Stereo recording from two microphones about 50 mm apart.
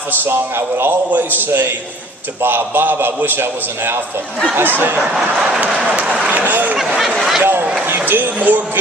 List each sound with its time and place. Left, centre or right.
0.3 s a man's voice: right
4.9 s speech: centre
5.8 s speech: right
7.2 s speech: centre
7.6 s speech: right
7.9 s speech: right